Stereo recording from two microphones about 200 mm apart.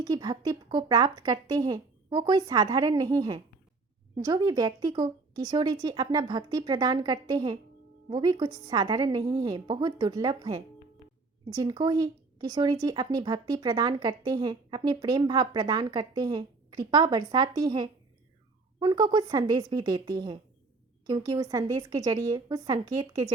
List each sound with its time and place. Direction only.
0.0 s speech: 20° right (ahead or behind)